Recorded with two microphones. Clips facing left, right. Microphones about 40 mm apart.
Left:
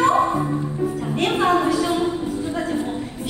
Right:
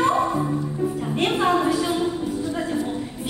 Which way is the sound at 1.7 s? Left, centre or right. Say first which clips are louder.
Left 2 dB; left.